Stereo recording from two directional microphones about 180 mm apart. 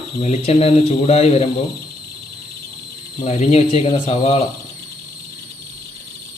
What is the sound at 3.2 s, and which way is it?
Speech, 35° left (ahead or behind).